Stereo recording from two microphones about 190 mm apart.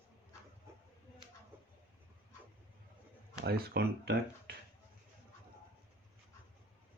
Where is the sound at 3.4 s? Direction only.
55° right (ahead or behind).